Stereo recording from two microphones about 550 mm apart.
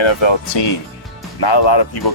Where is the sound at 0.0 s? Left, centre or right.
Left.